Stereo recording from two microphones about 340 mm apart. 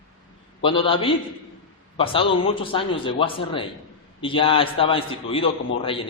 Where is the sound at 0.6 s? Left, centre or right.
Centre.